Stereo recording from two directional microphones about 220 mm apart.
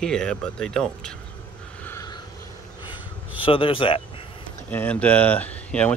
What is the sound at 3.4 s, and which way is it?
Speech, 25° left (ahead or behind).